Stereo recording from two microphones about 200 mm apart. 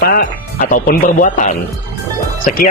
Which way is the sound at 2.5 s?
45° left (ahead or behind).